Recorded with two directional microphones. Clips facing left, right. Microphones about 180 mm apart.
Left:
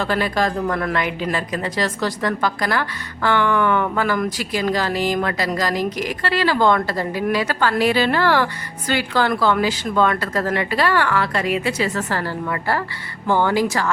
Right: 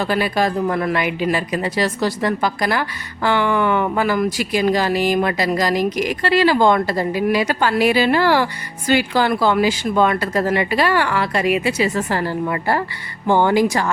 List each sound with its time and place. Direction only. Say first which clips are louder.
0.0 s speech: right 2 dB; 10° right (ahead or behind)